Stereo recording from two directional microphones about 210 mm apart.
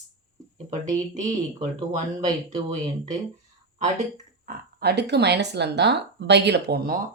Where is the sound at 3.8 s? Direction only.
35° right (ahead or behind).